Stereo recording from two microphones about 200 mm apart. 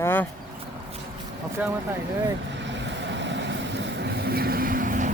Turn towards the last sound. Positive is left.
turn(degrees=-40)  # may be behind; listen again after turning